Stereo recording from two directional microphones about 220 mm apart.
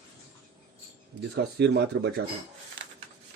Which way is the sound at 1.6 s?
50° right (ahead or behind).